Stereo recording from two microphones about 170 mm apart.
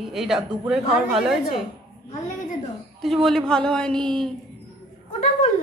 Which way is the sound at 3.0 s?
Centre (ahead or behind).